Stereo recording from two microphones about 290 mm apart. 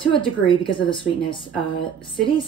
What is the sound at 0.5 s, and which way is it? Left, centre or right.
A woman's voice, centre.